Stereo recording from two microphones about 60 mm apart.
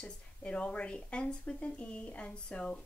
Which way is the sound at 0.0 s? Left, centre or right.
Centre.